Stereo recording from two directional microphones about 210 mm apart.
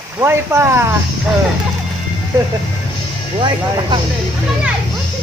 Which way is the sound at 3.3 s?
25° right (ahead or behind).